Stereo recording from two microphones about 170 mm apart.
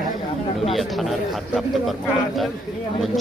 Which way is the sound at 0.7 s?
Centre (ahead or behind).